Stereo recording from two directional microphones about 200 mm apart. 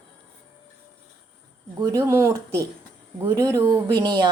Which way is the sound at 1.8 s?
15° right (ahead or behind).